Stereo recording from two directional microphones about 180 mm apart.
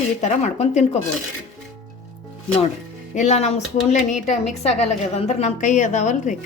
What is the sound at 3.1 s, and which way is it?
A woman's voice, 40° left (ahead or behind).